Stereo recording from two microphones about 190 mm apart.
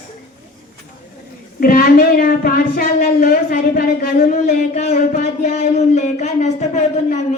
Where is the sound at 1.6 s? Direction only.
50° left (ahead or behind).